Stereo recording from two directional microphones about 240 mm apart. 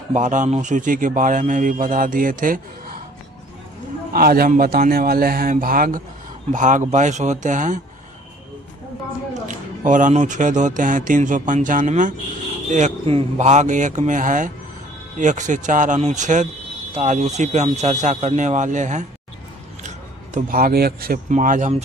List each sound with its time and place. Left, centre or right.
0.1 s a man's voice: right
4.1 s a man's voice: right
9.3 s a man's voice: right
20.3 s a man's voice: right